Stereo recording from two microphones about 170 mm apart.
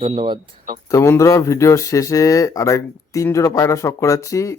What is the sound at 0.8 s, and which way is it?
Speech, 20° left (ahead or behind).